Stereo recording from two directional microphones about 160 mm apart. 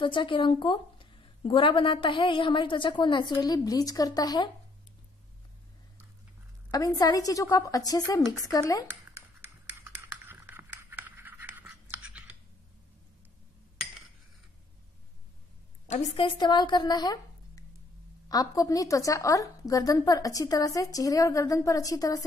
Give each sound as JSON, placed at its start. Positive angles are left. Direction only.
{"t": 0.0, "sound": "a woman's voice", "side_deg": 30}
{"t": 6.7, "sound": "a woman's voice", "side_deg": 25}
{"t": 9.1, "sound": "a sound", "side_deg": -15}
{"t": 15.9, "sound": "a woman's voice", "side_deg": 45}
{"t": 16.3, "sound": "a woman's voice", "side_deg": 30}